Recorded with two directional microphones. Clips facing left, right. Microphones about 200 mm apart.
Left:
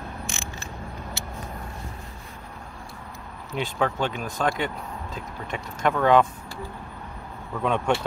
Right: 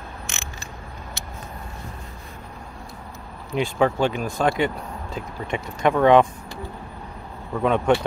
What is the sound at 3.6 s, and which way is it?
Speech, 10° right (ahead or behind).